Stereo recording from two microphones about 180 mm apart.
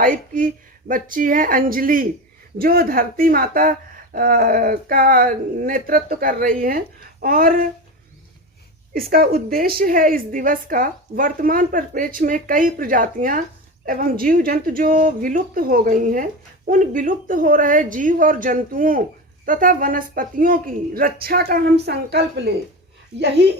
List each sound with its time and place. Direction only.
0.0 s speech: 50° right (ahead or behind)
8.9 s a woman's voice: 55° right (ahead or behind)